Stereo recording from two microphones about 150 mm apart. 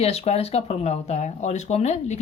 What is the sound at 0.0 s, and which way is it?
Speech, 45° left (ahead or behind).